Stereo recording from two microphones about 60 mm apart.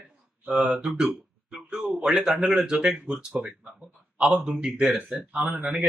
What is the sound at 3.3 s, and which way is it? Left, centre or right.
Speech, right.